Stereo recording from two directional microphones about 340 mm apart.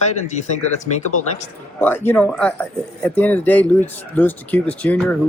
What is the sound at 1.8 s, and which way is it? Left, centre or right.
Speech, centre.